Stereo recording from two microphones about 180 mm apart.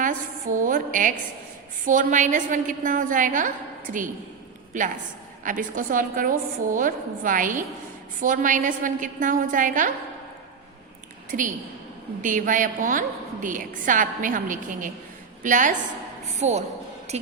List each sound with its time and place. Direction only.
0.0 s a woman's voice: 45° right (ahead or behind)
4.7 s a woman's voice: 45° right (ahead or behind)
11.3 s a woman's voice: 50° right (ahead or behind)